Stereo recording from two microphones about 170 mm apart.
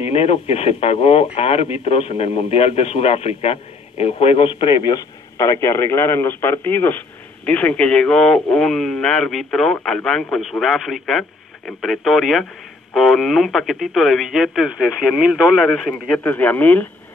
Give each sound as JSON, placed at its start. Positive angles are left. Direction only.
{"t": 0.0, "sound": "a man's voice", "side_deg": 35}